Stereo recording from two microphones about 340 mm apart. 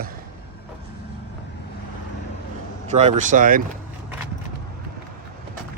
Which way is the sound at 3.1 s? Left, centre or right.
Right.